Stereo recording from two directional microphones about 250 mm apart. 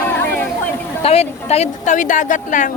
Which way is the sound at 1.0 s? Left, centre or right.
Left.